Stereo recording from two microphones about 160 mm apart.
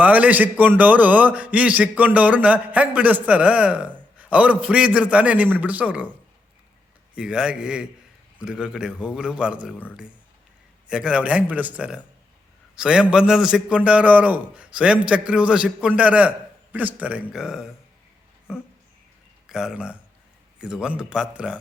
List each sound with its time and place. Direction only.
0.0 s a man's voice: 10° right (ahead or behind)
7.2 s a man's voice: 5° right (ahead or behind)
10.8 s a man's voice: 5° right (ahead or behind)
19.5 s a man's voice: 5° right (ahead or behind)